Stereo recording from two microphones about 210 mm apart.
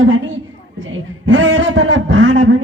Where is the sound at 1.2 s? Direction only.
65° right (ahead or behind).